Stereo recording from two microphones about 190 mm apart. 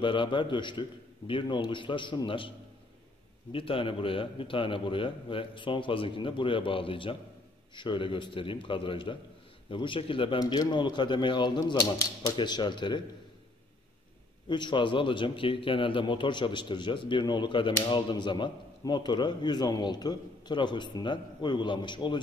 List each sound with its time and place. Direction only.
0.0 s a man's voice: 25° left (ahead or behind)
3.5 s a man's voice: 30° left (ahead or behind)
14.5 s a man's voice: 25° left (ahead or behind)